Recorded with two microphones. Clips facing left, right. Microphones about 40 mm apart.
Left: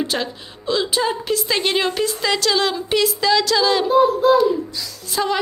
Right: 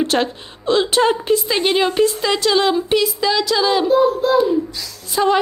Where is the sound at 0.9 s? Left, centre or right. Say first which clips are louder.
Right 5 dB; right.